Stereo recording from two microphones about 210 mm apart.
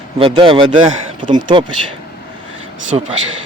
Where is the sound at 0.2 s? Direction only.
25° right (ahead or behind).